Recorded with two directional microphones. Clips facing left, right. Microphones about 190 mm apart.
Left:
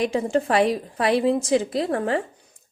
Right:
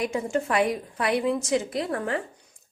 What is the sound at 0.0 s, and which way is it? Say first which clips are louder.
A woman's voice: left 4 dB; 30° left (ahead or behind).